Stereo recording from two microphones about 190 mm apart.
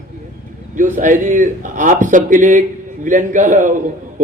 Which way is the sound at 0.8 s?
45° right (ahead or behind).